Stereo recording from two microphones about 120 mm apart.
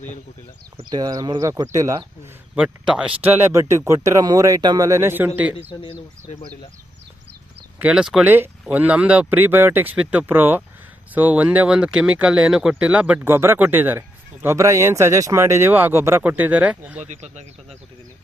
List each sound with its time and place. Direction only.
0.9 s speech: 35° right (ahead or behind)
2.6 s speech: 5° right (ahead or behind)
3.2 s speech: 20° right (ahead or behind)
7.8 s speech: 10° right (ahead or behind)
17.0 s speech: 75° right (ahead or behind)